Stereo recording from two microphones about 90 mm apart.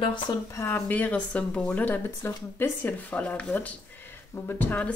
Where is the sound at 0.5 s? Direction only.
25° left (ahead or behind).